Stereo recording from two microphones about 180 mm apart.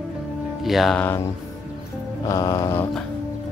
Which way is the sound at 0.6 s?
Centre (ahead or behind).